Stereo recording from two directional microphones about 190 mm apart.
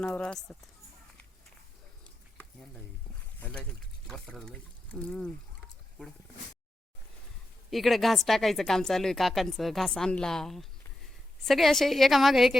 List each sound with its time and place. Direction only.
0.0 s a woman's voice: 5° left (ahead or behind)
2.4 s frying: centre (ahead or behind)
3.4 s speech: 5° left (ahead or behind)
7.7 s a woman's voice: centre (ahead or behind)